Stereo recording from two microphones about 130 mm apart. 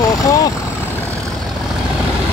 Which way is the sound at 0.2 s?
25° left (ahead or behind).